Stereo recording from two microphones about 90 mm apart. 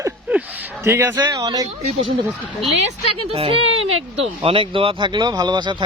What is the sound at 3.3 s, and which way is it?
Speech, 90° right.